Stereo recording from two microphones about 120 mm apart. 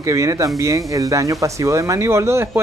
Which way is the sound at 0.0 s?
25° right (ahead or behind).